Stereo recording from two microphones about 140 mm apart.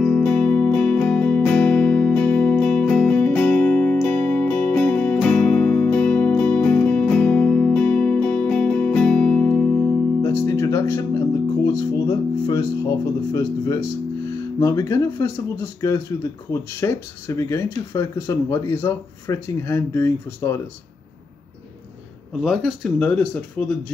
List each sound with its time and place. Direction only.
0.0 s music: 10° left (ahead or behind)
10.2 s music: 20° left (ahead or behind)
14.6 s speech: 20° left (ahead or behind)
22.4 s speech: 5° right (ahead or behind)
22.9 s speech: 10° left (ahead or behind)